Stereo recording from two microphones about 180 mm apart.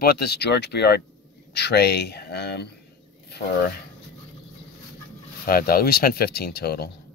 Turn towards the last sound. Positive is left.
turn(degrees=60)  # may be behind; listen again after turning